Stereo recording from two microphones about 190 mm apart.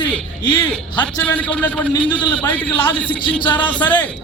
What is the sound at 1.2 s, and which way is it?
A man's voice, 10° left (ahead or behind).